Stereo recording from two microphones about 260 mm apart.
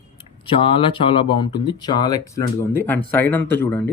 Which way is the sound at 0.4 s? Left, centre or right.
Centre.